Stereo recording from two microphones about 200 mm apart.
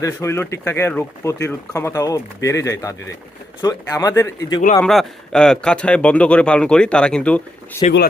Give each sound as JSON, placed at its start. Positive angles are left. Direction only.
{"t": 0.0, "sound": "speech", "side_deg": 15}
{"t": 4.8, "sound": "speech", "side_deg": 0}